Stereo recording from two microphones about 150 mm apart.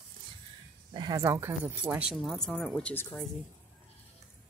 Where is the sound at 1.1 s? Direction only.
20° right (ahead or behind).